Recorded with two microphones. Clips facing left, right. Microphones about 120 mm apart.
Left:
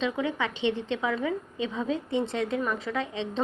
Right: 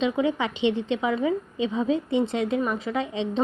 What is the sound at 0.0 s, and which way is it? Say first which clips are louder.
A woman's voice: right 5 dB; 20° right (ahead or behind).